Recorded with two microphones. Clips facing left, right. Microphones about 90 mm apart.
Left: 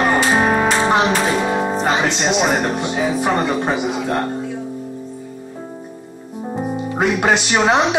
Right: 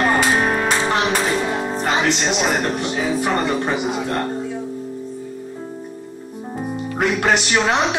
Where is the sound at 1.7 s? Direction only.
20° left (ahead or behind).